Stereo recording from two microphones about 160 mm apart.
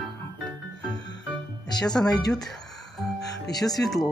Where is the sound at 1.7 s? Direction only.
25° left (ahead or behind).